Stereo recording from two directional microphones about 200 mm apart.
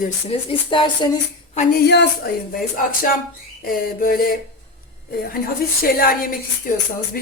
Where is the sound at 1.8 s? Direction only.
60° left (ahead or behind).